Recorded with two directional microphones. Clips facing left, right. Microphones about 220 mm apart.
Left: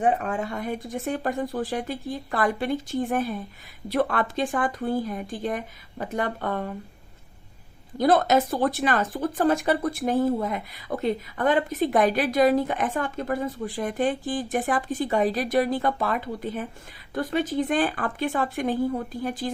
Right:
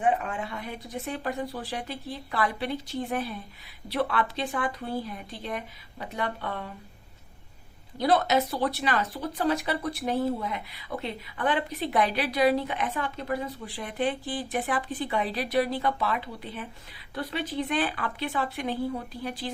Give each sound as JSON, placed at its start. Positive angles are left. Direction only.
{"t": 0.0, "sound": "speech", "side_deg": 40}
{"t": 7.9, "sound": "speech", "side_deg": 50}